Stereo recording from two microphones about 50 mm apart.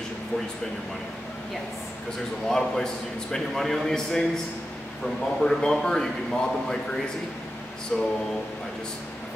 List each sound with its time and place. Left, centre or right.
2.4 s a man's voice: centre